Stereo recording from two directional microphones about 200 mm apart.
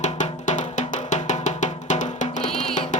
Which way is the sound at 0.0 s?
35° left (ahead or behind).